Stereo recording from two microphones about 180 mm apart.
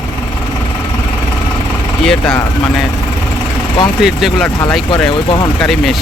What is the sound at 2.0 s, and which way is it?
Speech, 5° left (ahead or behind).